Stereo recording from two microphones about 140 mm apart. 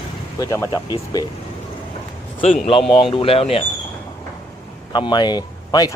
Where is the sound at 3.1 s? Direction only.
40° left (ahead or behind).